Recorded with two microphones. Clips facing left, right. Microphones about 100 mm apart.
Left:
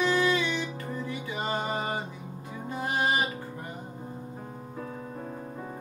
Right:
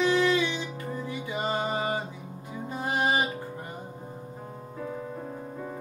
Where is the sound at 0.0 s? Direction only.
20° right (ahead or behind).